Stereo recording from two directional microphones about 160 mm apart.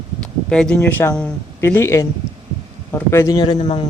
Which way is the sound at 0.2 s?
5° left (ahead or behind).